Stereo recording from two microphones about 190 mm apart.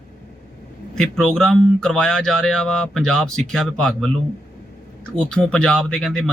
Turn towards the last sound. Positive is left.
turn(degrees=5)  # may be behind; listen again after turning